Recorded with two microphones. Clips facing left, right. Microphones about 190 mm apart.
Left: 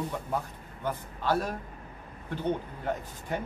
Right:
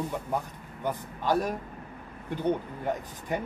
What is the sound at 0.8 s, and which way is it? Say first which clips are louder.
Speech: right 1 dB; 15° right (ahead or behind).